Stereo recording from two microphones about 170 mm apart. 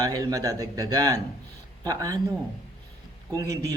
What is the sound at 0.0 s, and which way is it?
Speech, 20° right (ahead or behind).